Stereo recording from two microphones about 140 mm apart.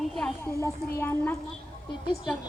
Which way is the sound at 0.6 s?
15° left (ahead or behind).